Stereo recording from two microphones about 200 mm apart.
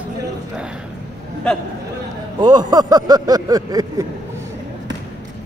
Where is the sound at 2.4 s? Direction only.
20° right (ahead or behind).